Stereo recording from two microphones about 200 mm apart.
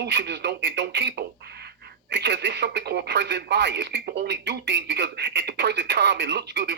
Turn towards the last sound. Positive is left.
turn(degrees=-55)  # may be behind; listen again after turning